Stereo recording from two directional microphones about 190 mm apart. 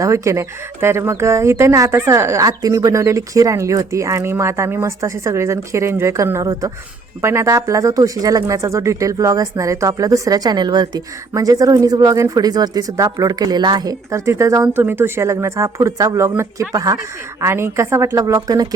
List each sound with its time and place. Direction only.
0.0 s speech: 15° right (ahead or behind)